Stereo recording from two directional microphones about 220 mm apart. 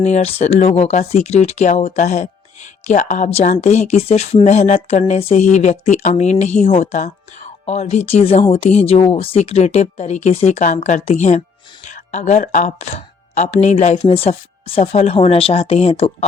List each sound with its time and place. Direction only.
0.0 s speech: 30° left (ahead or behind)